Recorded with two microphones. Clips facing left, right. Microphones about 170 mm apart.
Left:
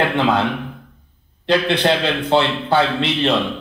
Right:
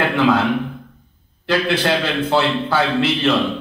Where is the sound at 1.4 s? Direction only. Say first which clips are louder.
Left 2 dB; 20° left (ahead or behind).